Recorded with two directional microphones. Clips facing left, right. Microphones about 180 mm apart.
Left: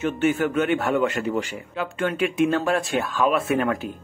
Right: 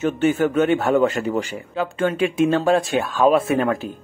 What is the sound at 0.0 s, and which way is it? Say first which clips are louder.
Speech: right 3 dB; 35° right (ahead or behind).